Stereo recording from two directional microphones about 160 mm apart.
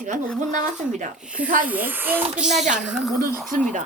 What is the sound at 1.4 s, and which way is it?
Speech, 60° right (ahead or behind).